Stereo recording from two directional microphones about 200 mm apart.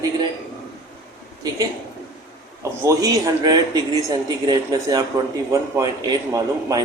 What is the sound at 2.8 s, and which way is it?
A man's voice, 15° right (ahead or behind).